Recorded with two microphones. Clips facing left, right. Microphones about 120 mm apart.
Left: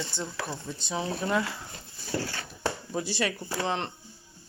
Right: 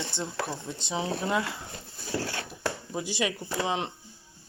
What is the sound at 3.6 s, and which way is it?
Speech, 10° right (ahead or behind).